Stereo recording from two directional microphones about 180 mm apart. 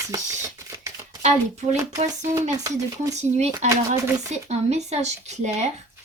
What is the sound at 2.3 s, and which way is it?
Speech, 20° right (ahead or behind).